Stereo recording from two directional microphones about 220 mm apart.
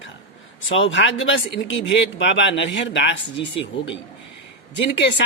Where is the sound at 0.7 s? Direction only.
60° left (ahead or behind).